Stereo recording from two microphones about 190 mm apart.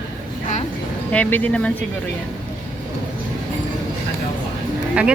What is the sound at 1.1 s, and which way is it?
Speech, 10° left (ahead or behind).